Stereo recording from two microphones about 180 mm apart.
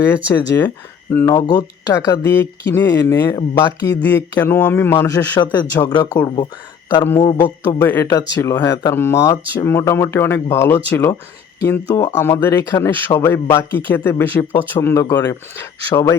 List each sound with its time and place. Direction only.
0.4 s speech: 20° left (ahead or behind)
7.0 s speech: 10° left (ahead or behind)